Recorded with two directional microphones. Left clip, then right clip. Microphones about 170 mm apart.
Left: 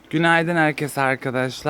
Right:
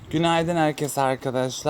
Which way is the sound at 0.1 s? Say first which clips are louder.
Left 4 dB; 20° left (ahead or behind).